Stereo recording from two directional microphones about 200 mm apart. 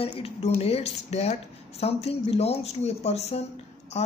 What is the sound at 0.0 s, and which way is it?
Speech, 30° left (ahead or behind).